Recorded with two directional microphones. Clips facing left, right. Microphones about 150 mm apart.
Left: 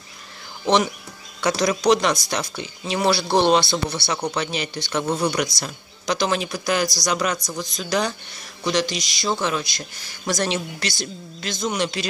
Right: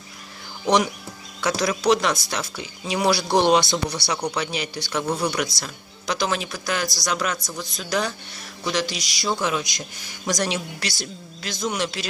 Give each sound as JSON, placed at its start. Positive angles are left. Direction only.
{"t": 1.4, "sound": "a woman's voice", "side_deg": -5}
{"t": 5.0, "sound": "speech", "side_deg": 10}
{"t": 5.3, "sound": "a woman's voice", "side_deg": -5}